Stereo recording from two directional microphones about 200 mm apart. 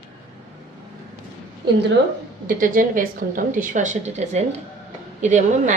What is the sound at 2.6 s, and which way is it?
A woman's voice, 45° right (ahead or behind).